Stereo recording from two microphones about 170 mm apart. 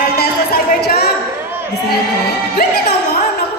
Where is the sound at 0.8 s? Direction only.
70° left (ahead or behind).